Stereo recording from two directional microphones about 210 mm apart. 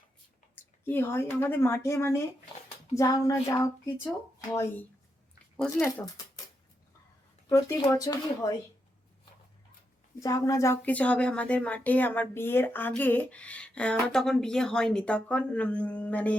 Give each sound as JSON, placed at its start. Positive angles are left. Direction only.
{"t": 0.9, "sound": "speech", "side_deg": 10}
{"t": 7.8, "sound": "speech", "side_deg": 15}
{"t": 10.2, "sound": "speech", "side_deg": 15}